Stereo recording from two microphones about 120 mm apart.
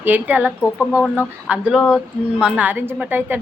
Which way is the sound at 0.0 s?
15° right (ahead or behind).